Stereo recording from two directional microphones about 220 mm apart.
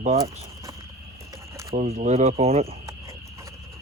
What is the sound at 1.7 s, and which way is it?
Speech, 30° right (ahead or behind).